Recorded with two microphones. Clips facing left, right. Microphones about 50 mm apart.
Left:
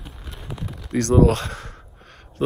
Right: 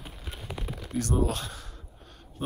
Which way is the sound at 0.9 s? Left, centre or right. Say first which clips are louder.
Left 11 dB; left.